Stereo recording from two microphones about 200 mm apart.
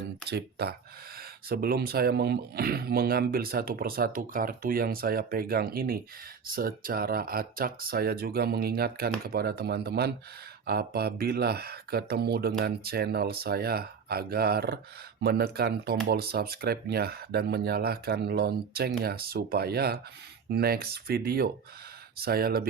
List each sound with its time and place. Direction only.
0.3 s speech: 55° right (ahead or behind)